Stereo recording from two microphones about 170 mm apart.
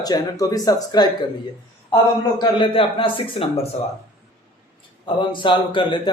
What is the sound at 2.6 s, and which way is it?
A man's voice, 30° left (ahead or behind).